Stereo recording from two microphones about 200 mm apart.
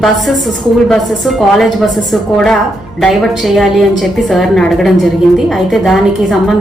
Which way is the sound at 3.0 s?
Centre (ahead or behind).